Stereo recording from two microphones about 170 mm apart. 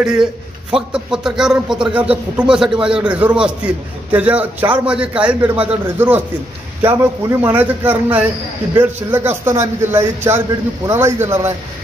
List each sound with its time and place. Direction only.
0.0 s a man's voice: 5° right (ahead or behind)